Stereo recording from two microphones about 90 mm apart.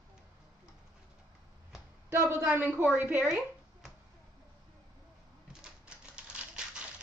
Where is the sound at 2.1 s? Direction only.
30° right (ahead or behind).